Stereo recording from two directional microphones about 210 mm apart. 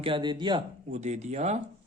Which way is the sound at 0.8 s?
35° right (ahead or behind).